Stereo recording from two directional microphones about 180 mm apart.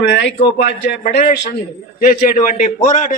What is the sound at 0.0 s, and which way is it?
Speech, 75° left (ahead or behind).